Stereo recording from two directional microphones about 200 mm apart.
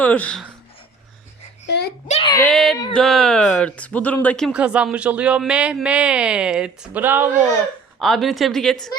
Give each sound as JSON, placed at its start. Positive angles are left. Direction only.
{"t": 0.0, "sound": "speech", "side_deg": 10}
{"t": 1.6, "sound": "a sound", "side_deg": 55}
{"t": 2.0, "sound": "speech", "side_deg": 30}
{"t": 2.5, "sound": "speech", "side_deg": 0}
{"t": 7.9, "sound": "speech", "side_deg": 0}